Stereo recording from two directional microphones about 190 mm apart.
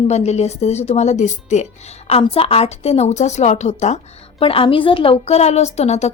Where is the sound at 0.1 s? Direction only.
35° left (ahead or behind).